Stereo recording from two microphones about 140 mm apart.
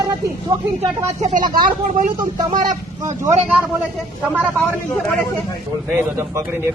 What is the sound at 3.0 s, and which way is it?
Speech, 20° right (ahead or behind).